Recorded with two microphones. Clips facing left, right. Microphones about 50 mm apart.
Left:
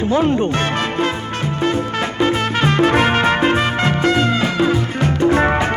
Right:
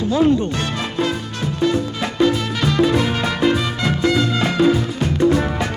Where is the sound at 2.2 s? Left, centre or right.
Left.